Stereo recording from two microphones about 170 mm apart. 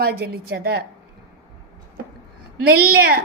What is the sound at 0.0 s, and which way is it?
Speech, 65° right (ahead or behind).